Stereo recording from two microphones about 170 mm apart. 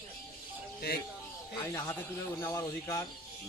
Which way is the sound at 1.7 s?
15° left (ahead or behind).